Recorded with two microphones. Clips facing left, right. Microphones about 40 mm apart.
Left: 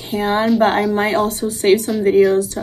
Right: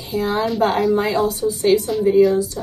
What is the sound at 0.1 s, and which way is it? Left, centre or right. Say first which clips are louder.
A woman's voice: left 4 dB; left.